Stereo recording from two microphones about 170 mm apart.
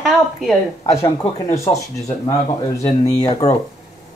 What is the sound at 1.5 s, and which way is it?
Music, 15° left (ahead or behind).